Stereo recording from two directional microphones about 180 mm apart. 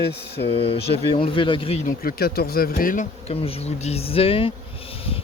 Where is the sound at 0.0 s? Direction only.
65° left (ahead or behind).